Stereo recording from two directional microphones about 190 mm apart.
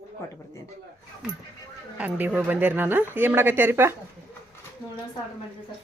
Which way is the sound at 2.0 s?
10° right (ahead or behind).